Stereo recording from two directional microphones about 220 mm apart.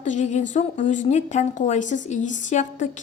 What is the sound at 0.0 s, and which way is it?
A woman's voice, 35° left (ahead or behind).